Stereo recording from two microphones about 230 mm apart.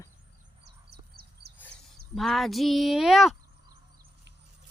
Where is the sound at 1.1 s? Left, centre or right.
Right.